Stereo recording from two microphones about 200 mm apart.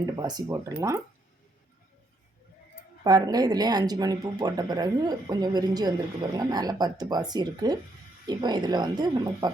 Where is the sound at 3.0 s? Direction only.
20° right (ahead or behind).